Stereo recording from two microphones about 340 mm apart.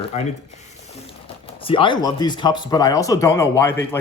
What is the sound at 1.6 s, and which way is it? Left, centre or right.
A man's voice, centre.